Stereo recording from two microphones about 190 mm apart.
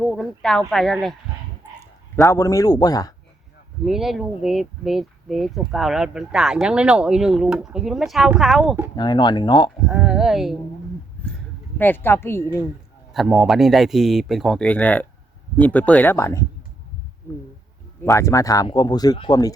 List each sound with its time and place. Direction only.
0.0 s speech: centre (ahead or behind)
2.1 s a man's voice: 15° left (ahead or behind)
3.8 s speech: centre (ahead or behind)
9.0 s speech: 25° left (ahead or behind)
9.9 s speech: centre (ahead or behind)
11.2 s a sound: 5° left (ahead or behind)
11.8 s a man's voice: 10° left (ahead or behind)
13.1 s a man's voice: 5° right (ahead or behind); by 16.5 s 15° left (ahead or behind)
18.0 s speech: 15° left (ahead or behind)